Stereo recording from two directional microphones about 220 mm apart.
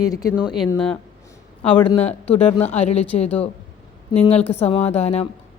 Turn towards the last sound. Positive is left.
turn(degrees=30)  # may be behind; listen again after turning